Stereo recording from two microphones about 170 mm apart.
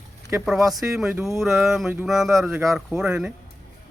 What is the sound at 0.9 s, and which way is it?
Speech, 10° right (ahead or behind).